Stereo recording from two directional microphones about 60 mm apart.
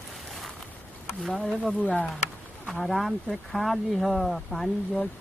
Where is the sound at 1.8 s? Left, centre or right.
Left.